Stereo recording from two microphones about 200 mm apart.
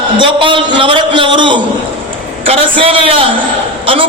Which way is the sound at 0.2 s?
25° right (ahead or behind).